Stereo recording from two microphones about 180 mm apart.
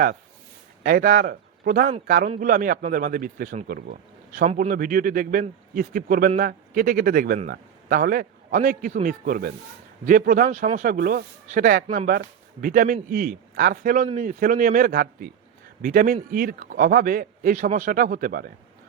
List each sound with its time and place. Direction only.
0.8 s a man's voice: 50° right (ahead or behind)